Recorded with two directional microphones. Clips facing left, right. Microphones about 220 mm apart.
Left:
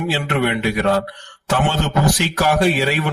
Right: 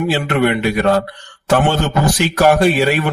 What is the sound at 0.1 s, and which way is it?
Speech, 50° right (ahead or behind).